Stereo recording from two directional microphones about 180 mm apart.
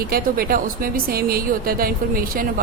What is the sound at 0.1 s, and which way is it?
A woman's voice, 55° right (ahead or behind).